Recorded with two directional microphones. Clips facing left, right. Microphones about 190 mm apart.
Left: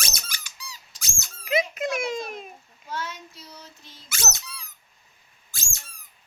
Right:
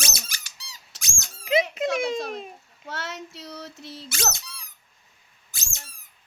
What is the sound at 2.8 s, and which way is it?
Child singing, 75° right (ahead or behind).